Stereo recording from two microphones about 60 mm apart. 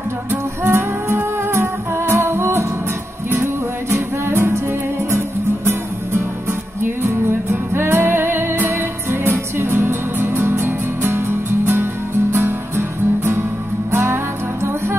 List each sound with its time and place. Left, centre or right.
0.3 s music: right
3.9 s music: right
7.7 s music: right